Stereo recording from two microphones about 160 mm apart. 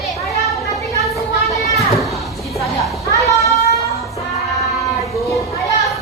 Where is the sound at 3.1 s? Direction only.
20° left (ahead or behind).